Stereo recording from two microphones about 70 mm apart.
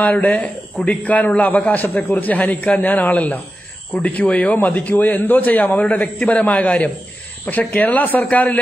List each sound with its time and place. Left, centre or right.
0.0 s a man's voice: left